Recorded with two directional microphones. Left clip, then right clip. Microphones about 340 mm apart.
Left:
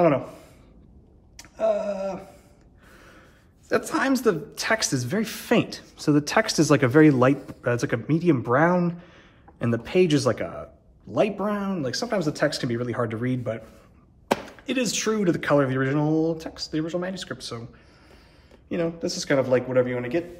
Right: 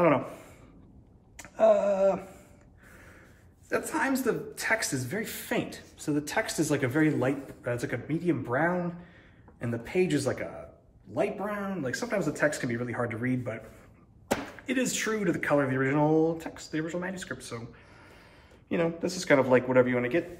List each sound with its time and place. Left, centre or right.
0.0 s speech: centre
1.4 s a sound: centre
3.6 s speech: centre
14.6 s speech: centre
18.7 s a man's voice: centre